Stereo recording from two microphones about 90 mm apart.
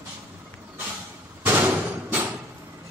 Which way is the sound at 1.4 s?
20° right (ahead or behind).